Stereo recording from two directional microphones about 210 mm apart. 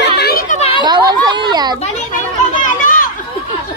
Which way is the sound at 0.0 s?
50° left (ahead or behind).